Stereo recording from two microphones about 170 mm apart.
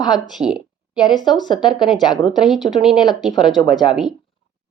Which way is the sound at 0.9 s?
25° left (ahead or behind).